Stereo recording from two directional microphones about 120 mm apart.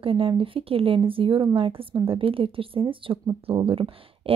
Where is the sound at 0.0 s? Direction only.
50° right (ahead or behind).